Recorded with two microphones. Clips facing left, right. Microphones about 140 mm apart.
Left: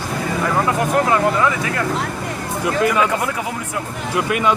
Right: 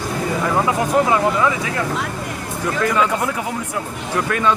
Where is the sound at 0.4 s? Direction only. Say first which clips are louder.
Left 1 dB; 5° right (ahead or behind).